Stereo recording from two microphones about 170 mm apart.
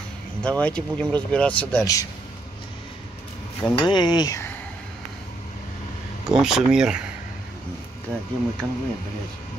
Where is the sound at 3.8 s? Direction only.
25° left (ahead or behind).